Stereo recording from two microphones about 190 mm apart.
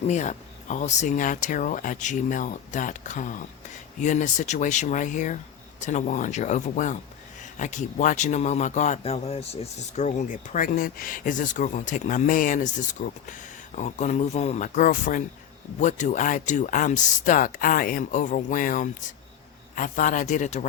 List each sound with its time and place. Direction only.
0.1 s a man's voice: 40° left (ahead or behind)